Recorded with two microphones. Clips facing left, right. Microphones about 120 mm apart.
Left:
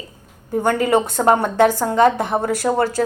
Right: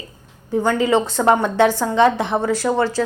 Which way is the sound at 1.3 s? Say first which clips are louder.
Left 1 dB; 40° left (ahead or behind).